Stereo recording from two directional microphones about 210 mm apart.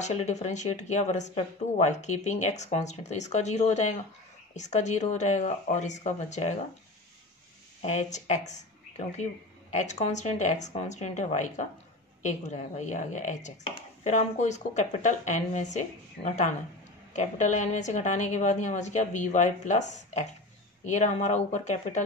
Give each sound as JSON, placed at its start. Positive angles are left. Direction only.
{"t": 0.0, "sound": "speech", "side_deg": 30}
{"t": 7.8, "sound": "speech", "side_deg": 35}